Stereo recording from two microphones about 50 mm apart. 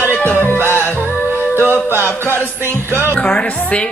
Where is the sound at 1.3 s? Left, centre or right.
Right.